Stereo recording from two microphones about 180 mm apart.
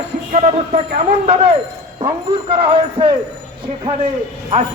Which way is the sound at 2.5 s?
30° right (ahead or behind).